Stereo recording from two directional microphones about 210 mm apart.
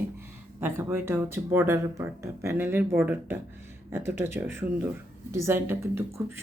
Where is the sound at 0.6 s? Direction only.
10° right (ahead or behind).